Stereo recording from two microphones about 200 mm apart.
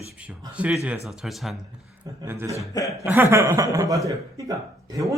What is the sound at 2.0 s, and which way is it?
Speech, 15° right (ahead or behind).